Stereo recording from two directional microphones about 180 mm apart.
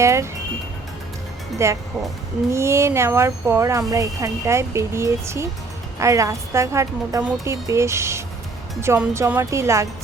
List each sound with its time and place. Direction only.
0.0 s speech: 15° right (ahead or behind)
1.5 s speech: 15° right (ahead or behind)